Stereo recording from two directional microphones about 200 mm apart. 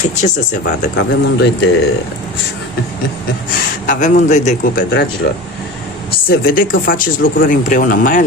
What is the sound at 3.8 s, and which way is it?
A man's voice, 40° left (ahead or behind).